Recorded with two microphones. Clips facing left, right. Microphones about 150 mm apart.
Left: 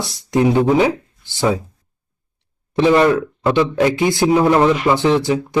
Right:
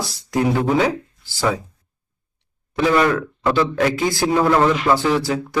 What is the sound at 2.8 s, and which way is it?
Speech, 25° left (ahead or behind).